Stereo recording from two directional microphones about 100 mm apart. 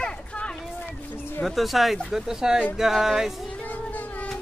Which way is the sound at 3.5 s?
15° left (ahead or behind).